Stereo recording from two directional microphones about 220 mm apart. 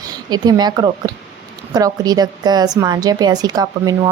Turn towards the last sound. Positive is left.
turn(degrees=-15)  # may be behind; listen again after turning